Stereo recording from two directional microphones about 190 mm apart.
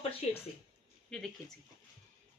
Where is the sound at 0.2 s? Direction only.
35° left (ahead or behind).